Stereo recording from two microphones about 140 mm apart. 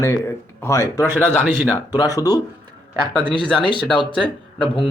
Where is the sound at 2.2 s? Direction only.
25° left (ahead or behind).